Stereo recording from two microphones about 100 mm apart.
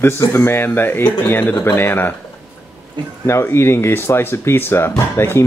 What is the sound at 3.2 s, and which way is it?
Speech, 25° left (ahead or behind).